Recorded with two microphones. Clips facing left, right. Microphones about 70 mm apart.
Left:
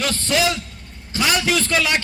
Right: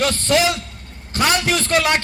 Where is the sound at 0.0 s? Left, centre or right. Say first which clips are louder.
Right 3 dB; right.